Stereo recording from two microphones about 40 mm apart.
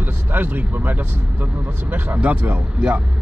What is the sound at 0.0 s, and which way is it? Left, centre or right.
Speech, right.